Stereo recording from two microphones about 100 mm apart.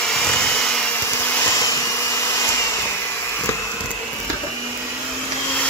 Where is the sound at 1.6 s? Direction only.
35° left (ahead or behind).